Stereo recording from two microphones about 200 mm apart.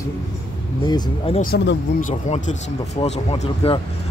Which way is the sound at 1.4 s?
50° left (ahead or behind).